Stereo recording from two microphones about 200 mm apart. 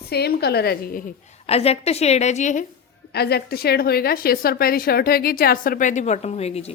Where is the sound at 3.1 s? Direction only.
55° left (ahead or behind).